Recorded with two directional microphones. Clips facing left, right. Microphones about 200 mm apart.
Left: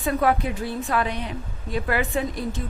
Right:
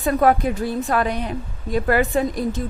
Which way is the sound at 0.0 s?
45° right (ahead or behind).